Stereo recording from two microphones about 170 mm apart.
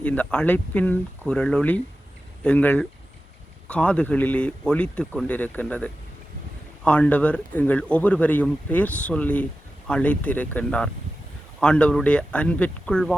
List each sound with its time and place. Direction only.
0.0 s speech: 10° left (ahead or behind)